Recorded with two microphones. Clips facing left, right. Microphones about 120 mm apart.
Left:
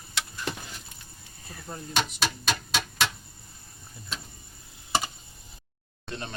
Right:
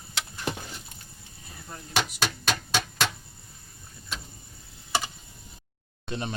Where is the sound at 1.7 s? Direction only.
25° left (ahead or behind).